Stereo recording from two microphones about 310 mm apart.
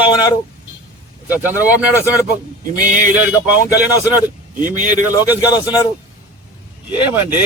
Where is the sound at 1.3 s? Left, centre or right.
Centre.